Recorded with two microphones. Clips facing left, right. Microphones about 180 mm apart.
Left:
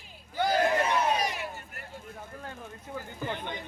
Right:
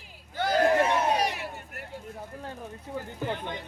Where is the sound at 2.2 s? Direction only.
35° right (ahead or behind).